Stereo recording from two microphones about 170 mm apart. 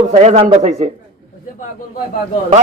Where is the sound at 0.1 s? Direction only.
35° right (ahead or behind).